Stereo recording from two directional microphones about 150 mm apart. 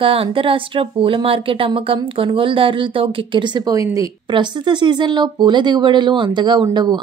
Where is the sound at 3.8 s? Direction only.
20° right (ahead or behind).